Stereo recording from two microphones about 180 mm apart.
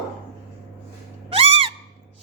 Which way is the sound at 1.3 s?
30° right (ahead or behind).